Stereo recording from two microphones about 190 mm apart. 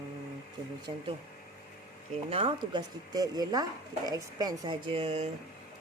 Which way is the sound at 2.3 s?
30° right (ahead or behind).